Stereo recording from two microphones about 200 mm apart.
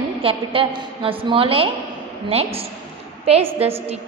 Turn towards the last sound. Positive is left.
turn(degrees=-30)  # may be behind; listen again after turning